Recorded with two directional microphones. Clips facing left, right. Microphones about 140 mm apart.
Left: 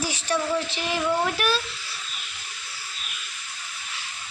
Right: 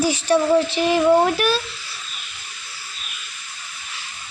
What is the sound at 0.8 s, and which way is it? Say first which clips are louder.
Speech: right 10 dB; 40° right (ahead or behind).